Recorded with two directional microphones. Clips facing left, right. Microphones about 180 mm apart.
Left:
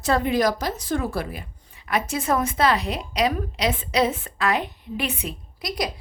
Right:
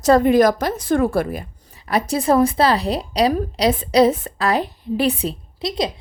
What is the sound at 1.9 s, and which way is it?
A woman's voice, 35° right (ahead or behind).